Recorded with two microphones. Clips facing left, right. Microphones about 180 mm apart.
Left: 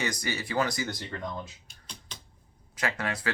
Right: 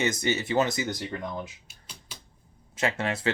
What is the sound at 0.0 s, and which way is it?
Speech, 25° right (ahead or behind).